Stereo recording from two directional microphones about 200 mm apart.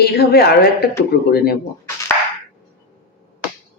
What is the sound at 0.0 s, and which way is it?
Speech, 50° left (ahead or behind).